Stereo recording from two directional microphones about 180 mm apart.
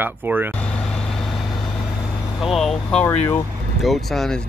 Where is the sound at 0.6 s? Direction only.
5° left (ahead or behind).